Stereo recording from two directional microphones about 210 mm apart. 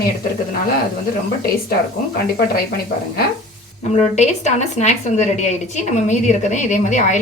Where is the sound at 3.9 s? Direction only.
35° left (ahead or behind).